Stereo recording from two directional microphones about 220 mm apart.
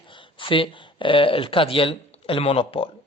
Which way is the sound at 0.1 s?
20° left (ahead or behind).